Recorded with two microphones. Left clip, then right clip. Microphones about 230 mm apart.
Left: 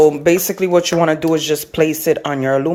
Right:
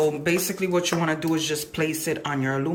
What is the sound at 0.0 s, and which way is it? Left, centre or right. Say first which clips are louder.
Speech: left 11 dB; left.